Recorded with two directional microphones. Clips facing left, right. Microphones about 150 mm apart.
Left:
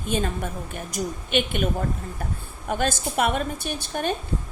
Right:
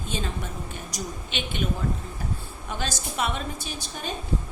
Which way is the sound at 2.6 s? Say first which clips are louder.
Left 7 dB; 55° left (ahead or behind).